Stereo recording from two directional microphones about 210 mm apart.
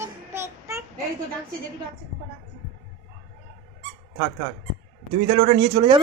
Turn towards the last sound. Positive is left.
turn(degrees=-25)  # may be behind; listen again after turning